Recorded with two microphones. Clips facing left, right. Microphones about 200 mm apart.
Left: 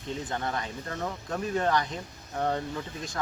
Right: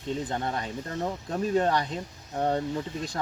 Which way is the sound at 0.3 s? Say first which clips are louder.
Right 2 dB; 25° right (ahead or behind).